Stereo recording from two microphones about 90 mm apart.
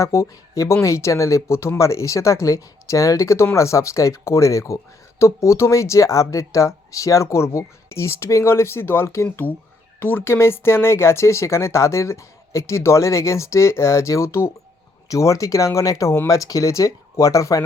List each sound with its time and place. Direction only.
0.0 s speech: 35° left (ahead or behind)